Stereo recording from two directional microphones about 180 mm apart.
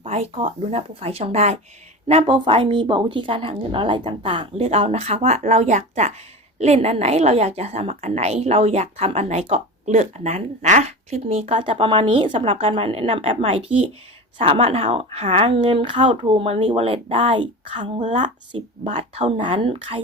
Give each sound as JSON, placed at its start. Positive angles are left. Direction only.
{"t": 0.0, "sound": "a woman's voice", "side_deg": -35}
{"t": 18.0, "sound": "a woman's voice", "side_deg": -40}
{"t": 18.5, "sound": "a woman's voice", "side_deg": -30}